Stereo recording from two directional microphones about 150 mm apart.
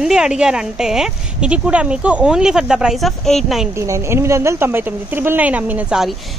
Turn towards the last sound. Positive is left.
turn(degrees=-10)  # may be behind; listen again after turning